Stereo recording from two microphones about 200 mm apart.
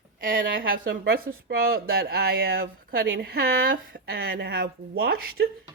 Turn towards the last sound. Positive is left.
turn(degrees=-50)  # may be behind; listen again after turning